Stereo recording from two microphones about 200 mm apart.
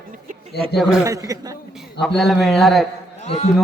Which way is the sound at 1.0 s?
15° right (ahead or behind).